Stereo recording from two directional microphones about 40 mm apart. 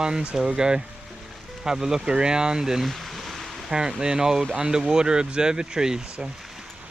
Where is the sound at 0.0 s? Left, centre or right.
Centre.